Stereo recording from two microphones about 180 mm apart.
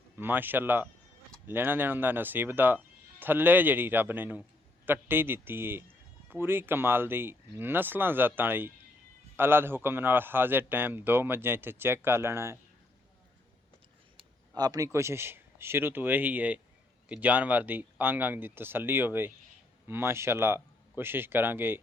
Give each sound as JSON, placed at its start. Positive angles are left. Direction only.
{"t": 0.2, "sound": "a man's voice", "side_deg": -10}
{"t": 14.5, "sound": "a man's voice", "side_deg": -20}